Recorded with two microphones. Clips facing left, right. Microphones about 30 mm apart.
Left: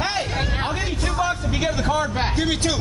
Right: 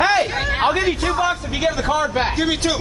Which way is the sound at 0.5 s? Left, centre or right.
Right.